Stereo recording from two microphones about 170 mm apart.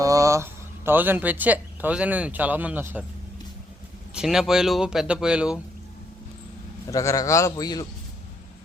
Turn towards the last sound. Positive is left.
turn(degrees=20)  # may be behind; listen again after turning